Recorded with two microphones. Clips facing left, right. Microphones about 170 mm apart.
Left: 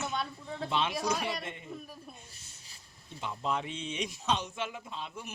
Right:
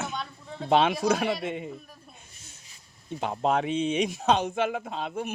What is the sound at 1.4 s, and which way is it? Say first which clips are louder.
Speech: right 11 dB; 80° right.